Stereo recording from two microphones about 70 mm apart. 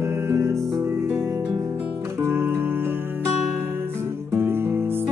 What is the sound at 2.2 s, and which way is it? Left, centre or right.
Music, right.